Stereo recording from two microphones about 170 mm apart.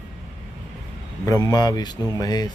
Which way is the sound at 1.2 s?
20° left (ahead or behind).